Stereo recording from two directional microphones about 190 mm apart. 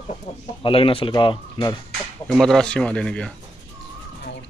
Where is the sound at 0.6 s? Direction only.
30° left (ahead or behind).